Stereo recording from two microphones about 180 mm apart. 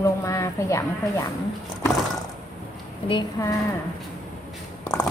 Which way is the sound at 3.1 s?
20° left (ahead or behind).